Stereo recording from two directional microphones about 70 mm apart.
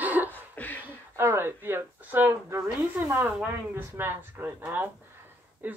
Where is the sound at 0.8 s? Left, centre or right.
Right.